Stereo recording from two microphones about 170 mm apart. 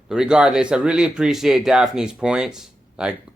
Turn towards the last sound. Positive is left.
turn(degrees=-5)  # may be behind; listen again after turning